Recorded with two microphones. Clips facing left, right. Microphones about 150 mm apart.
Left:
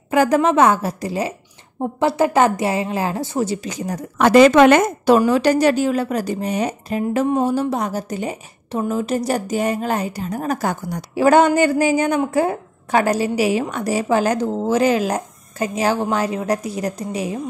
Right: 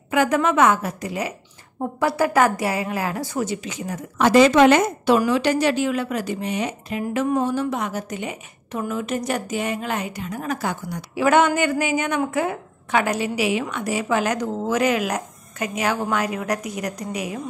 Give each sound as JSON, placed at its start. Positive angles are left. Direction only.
{"t": 0.1, "sound": "a woman's voice", "side_deg": 35}
{"t": 4.2, "sound": "a woman's voice", "side_deg": 55}